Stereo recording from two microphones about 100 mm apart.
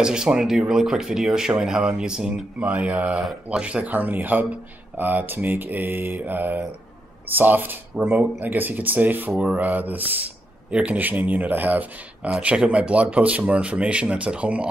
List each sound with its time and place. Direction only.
0.0 s speech: 10° right (ahead or behind)
3.1 s speech: centre (ahead or behind)